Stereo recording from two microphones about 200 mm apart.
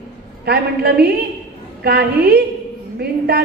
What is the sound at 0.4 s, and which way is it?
A man's voice, 50° right (ahead or behind).